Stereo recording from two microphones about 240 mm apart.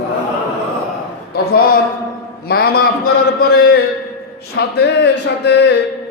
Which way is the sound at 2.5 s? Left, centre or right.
Left.